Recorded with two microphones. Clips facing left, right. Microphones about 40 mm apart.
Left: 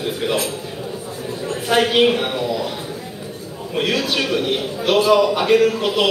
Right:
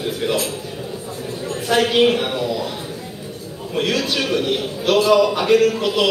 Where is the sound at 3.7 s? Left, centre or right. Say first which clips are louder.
Even; centre.